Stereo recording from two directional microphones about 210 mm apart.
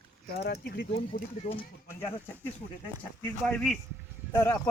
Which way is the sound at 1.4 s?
35° left (ahead or behind).